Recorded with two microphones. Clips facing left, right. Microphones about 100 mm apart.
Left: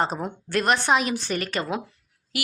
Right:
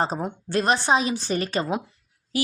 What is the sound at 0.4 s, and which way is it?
A woman's voice, 30° right (ahead or behind).